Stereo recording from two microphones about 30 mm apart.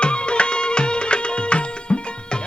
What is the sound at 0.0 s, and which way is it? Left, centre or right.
Music, left.